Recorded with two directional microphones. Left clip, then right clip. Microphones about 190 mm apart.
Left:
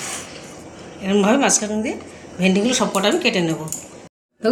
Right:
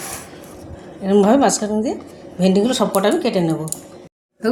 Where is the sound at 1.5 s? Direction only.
15° right (ahead or behind).